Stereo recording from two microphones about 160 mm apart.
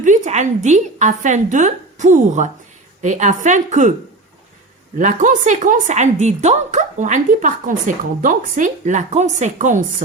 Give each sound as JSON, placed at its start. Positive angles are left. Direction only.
{"t": 0.0, "sound": "a woman's voice", "side_deg": -50}
{"t": 4.9, "sound": "a woman's voice", "side_deg": -55}